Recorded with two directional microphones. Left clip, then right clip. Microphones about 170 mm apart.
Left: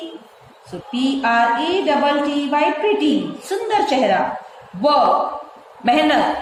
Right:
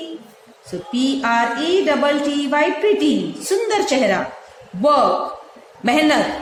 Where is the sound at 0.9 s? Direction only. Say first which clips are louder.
Left 1 dB; 40° right (ahead or behind).